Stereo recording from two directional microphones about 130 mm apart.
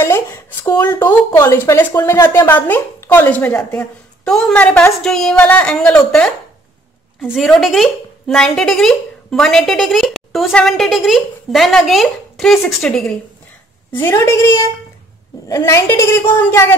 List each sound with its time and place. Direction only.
0.0 s a woman's voice: 20° left (ahead or behind); by 13.1 s centre (ahead or behind)
13.9 s a woman's voice: 20° left (ahead or behind)